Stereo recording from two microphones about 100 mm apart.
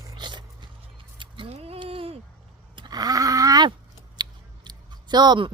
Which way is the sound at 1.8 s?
65° right (ahead or behind).